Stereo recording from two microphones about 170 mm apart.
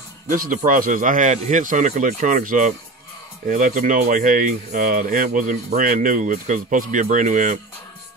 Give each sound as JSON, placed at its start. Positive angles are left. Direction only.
{"t": 0.3, "sound": "speech", "side_deg": -50}